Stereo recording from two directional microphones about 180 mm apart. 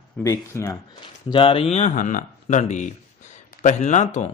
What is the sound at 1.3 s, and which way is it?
Speech, 30° left (ahead or behind).